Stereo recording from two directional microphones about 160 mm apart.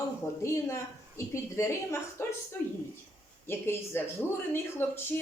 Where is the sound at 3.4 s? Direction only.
15° left (ahead or behind).